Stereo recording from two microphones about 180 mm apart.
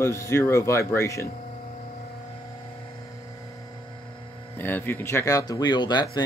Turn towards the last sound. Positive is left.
turn(degrees=25)  # may be behind; listen again after turning